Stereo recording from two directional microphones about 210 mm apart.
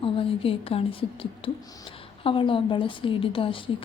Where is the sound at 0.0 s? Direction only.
25° left (ahead or behind).